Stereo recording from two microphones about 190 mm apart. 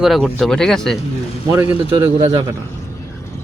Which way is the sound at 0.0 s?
Centre (ahead or behind).